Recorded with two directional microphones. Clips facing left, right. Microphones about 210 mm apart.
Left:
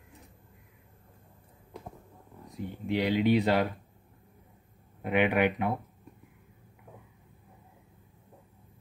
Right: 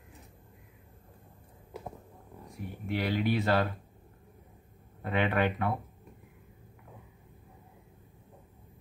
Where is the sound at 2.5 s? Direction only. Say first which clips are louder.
Left 4 dB; 20° left (ahead or behind).